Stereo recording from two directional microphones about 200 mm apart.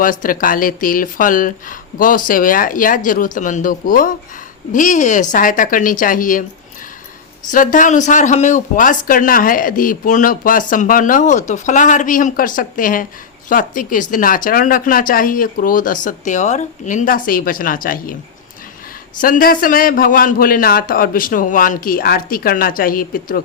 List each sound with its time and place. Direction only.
0.0 s speech: 45° left (ahead or behind)
7.5 s speech: 40° left (ahead or behind)
19.2 s speech: 45° left (ahead or behind)